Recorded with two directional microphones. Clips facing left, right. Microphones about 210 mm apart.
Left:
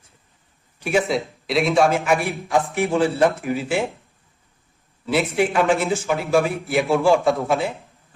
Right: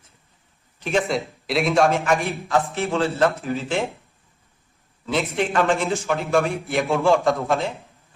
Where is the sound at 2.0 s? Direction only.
15° left (ahead or behind).